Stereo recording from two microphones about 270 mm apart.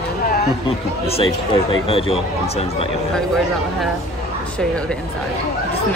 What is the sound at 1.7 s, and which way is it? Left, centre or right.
Speech, left.